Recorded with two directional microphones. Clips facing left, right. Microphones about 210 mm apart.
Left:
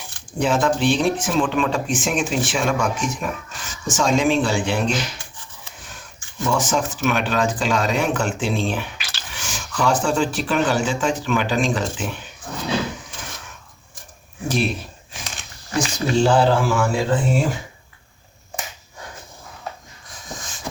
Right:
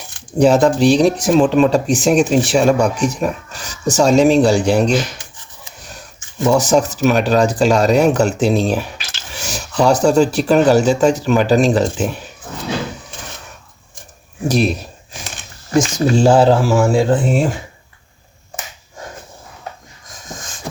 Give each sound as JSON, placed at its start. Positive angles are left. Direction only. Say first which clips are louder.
{"t": 0.3, "sound": "speech", "louder": "right 8 dB", "side_deg": -40}
{"t": 6.5, "sound": "speech", "louder": "right 8 dB", "side_deg": -40}
{"t": 9.3, "sound": "a sound", "louder": "right 7 dB", "side_deg": -40}
{"t": 9.8, "sound": "speech", "louder": "right 8 dB", "side_deg": -40}
{"t": 14.4, "sound": "speech", "louder": "right 6 dB", "side_deg": -40}
{"t": 15.7, "sound": "speech", "louder": "right 6 dB", "side_deg": -45}